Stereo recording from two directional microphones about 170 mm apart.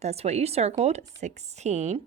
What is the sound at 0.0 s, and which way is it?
A woman's voice, 40° right (ahead or behind).